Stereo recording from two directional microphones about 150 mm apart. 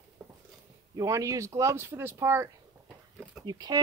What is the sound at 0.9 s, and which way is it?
Speech, 20° right (ahead or behind).